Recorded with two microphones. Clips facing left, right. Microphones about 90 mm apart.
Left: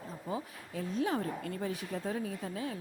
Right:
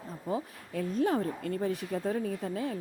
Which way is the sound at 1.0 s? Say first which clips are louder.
Right 4 dB; 40° right (ahead or behind).